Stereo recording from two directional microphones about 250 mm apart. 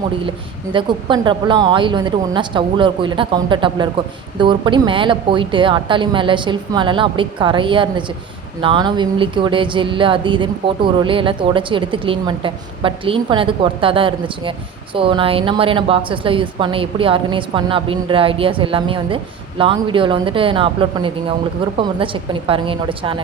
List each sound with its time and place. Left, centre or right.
0.3 s a woman's voice: centre